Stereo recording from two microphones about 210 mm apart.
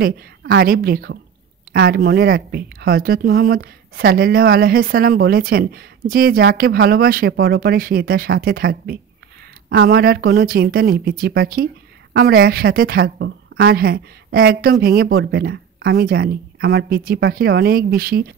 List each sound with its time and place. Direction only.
0.0 s speech: 45° right (ahead or behind)